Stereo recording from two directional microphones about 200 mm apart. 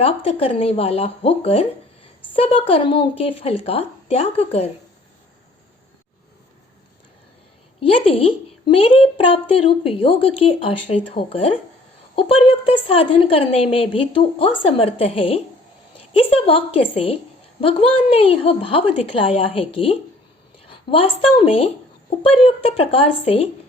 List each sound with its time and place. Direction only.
0.0 s a woman's voice: 30° left (ahead or behind)
7.8 s a woman's voice: 30° left (ahead or behind)